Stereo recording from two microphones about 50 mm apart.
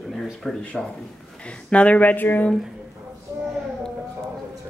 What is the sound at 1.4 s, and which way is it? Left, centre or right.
Speech, left.